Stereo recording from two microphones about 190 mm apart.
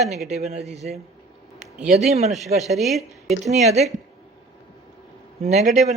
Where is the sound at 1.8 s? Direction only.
35° right (ahead or behind).